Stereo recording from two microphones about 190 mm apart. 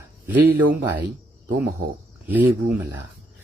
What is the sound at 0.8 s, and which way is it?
Speech, 20° right (ahead or behind).